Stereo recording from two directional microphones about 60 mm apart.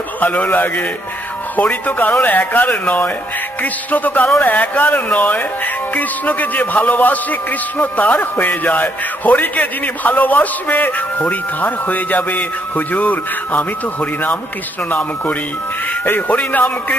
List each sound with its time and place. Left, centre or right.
0.2 s a man's voice: left
14.9 s a man's voice: left